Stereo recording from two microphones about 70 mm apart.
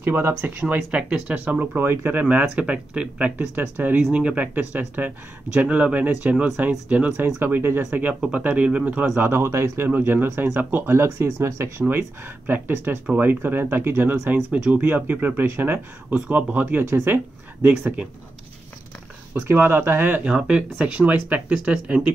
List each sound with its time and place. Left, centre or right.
0.0 s speech: right
1.1 s speech: right
4.1 s speech: centre
7.4 s speech: right
9.2 s speech: right
9.8 s speech: right
12.4 s speech: right
19.4 s speech: right
20.2 s speech: centre